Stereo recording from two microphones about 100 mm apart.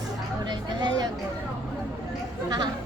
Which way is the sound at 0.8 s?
45° right (ahead or behind).